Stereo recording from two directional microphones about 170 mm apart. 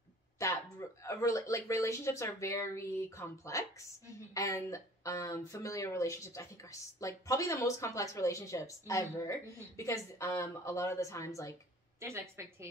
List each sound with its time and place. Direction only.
0.4 s speech: 15° left (ahead or behind)
12.0 s a woman's voice: 15° right (ahead or behind)